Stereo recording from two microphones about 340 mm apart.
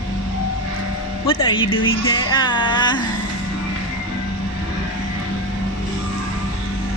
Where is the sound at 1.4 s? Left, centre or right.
Left.